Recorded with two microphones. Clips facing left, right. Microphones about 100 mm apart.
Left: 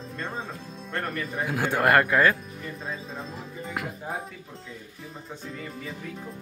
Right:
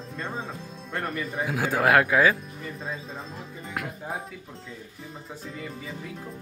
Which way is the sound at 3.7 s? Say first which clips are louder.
Even; centre (ahead or behind).